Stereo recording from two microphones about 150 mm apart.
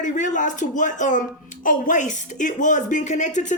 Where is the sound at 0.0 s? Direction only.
55° left (ahead or behind).